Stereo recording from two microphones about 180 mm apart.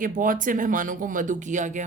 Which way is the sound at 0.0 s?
50° right (ahead or behind).